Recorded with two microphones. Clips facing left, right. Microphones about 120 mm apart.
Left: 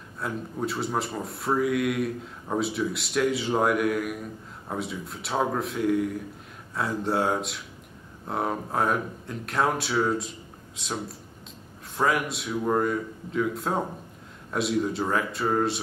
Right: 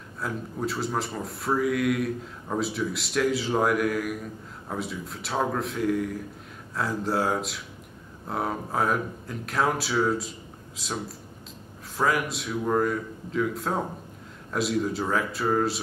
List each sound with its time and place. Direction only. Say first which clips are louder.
0.2 s speech: even; centre (ahead or behind)